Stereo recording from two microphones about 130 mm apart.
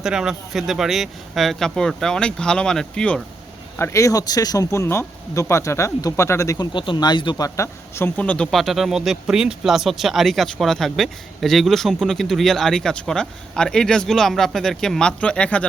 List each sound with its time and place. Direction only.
0.0 s speech: 5° right (ahead or behind)
3.8 s speech: 20° left (ahead or behind)
6.7 s speech: 35° left (ahead or behind); by 15.6 s 10° left (ahead or behind)